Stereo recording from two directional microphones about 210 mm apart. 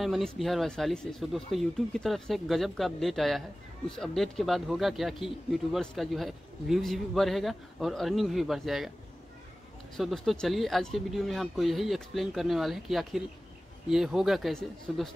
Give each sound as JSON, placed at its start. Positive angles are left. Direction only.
{"t": 0.0, "sound": "a man's voice", "side_deg": 0}
{"t": 9.9, "sound": "a man's voice", "side_deg": 0}